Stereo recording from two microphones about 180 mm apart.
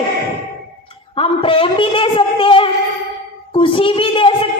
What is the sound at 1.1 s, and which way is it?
Speech, 30° left (ahead or behind).